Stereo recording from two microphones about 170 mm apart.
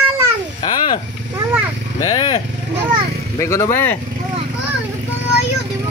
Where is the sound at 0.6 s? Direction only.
25° left (ahead or behind).